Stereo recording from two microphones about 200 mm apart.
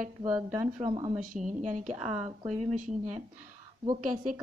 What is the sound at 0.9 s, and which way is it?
Speech, 25° right (ahead or behind).